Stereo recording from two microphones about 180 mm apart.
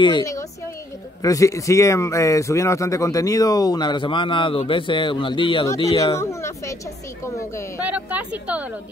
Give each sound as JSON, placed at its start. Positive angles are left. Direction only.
{"t": 0.0, "sound": "speech", "side_deg": 20}
{"t": 6.1, "sound": "speech", "side_deg": 15}
{"t": 7.8, "sound": "speech", "side_deg": -10}